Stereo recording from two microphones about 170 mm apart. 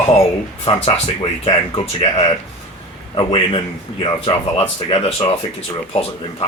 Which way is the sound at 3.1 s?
30° left (ahead or behind).